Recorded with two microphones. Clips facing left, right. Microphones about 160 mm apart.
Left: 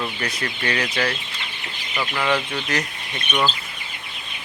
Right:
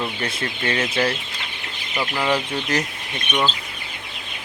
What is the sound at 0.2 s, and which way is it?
Speech, 25° right (ahead or behind).